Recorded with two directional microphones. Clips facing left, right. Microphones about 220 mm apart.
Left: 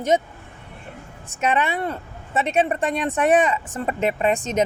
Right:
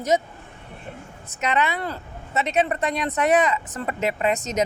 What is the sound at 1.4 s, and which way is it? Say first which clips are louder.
A woman's voice: left 2 dB; 30° left (ahead or behind).